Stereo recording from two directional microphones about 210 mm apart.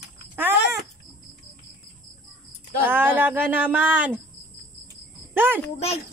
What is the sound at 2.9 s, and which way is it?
A woman's voice, 10° right (ahead or behind).